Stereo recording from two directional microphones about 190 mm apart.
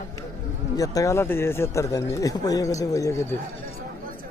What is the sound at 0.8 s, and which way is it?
Speech, 15° left (ahead or behind).